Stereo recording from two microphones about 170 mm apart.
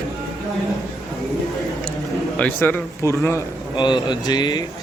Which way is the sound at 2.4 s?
10° left (ahead or behind).